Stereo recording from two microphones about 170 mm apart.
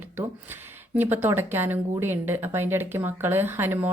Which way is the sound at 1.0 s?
10° right (ahead or behind).